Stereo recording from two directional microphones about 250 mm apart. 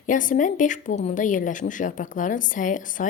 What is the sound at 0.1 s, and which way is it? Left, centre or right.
A woman's voice, left.